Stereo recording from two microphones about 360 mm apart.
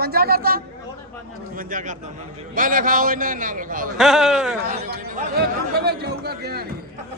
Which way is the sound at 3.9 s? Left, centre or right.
Centre.